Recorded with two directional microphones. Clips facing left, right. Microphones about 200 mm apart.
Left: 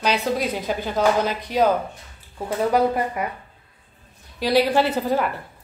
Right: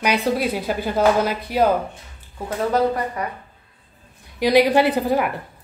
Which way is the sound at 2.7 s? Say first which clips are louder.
Right 1 dB; 15° left (ahead or behind).